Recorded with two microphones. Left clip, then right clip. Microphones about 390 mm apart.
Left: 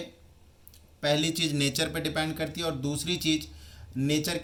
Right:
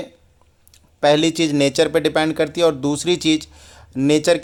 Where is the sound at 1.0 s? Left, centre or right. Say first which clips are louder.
Right 11 dB; centre.